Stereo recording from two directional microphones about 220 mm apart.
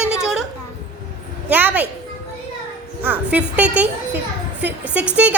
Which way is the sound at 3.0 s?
5° right (ahead or behind).